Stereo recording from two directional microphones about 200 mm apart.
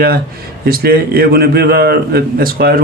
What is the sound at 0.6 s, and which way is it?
Speech, 50° right (ahead or behind).